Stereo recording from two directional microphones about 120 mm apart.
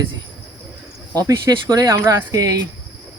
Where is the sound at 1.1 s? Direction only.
30° right (ahead or behind).